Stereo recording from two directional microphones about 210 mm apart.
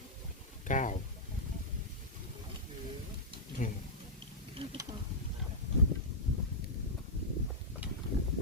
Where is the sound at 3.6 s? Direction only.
40° left (ahead or behind).